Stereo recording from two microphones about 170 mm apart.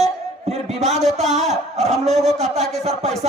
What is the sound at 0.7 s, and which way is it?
Speech, 40° right (ahead or behind).